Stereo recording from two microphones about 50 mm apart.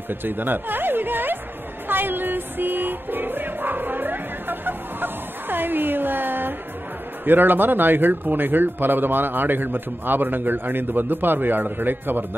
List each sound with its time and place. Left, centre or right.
0.1 s speech: right
1.9 s music: right
7.2 s speech: right